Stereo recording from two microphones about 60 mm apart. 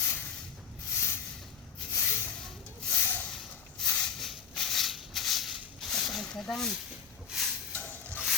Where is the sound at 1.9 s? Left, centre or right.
Left.